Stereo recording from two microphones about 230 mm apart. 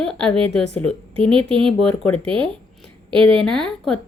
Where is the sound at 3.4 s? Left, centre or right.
Centre.